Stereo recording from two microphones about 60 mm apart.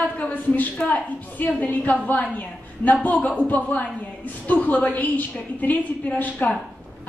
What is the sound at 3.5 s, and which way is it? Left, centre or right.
A woman's voice, left.